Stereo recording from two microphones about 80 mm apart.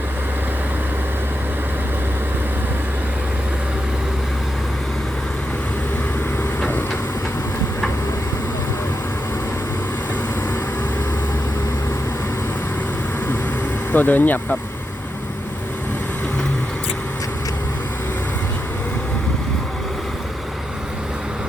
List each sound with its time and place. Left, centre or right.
13.9 s speech: left